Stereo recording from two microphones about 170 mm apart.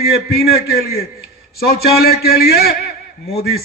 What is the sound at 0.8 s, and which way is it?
A man's voice, 65° left (ahead or behind).